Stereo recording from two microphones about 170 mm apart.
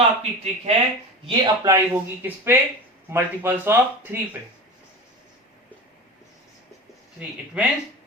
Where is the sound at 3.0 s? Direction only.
15° right (ahead or behind).